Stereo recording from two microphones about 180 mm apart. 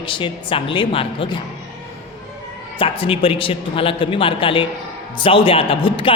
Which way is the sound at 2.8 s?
30° left (ahead or behind).